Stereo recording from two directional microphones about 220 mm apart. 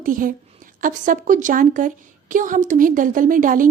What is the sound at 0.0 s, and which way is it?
A woman's voice, 40° right (ahead or behind).